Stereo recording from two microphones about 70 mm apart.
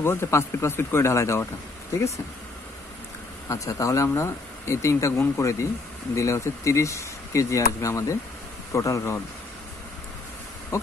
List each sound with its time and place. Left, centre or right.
0.0 s speech: left
3.4 s speech: left
10.7 s music: left